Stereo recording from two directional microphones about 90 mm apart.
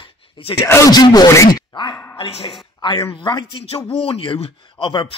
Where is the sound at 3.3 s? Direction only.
55° left (ahead or behind).